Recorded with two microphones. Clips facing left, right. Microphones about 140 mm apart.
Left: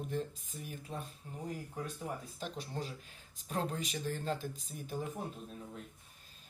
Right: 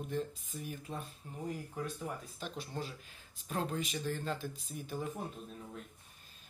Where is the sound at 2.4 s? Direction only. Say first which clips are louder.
Right 1 dB; 40° left (ahead or behind).